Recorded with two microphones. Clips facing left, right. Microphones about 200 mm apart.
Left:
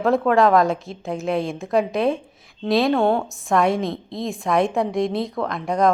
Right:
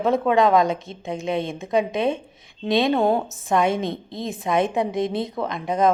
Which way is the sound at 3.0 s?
20° right (ahead or behind).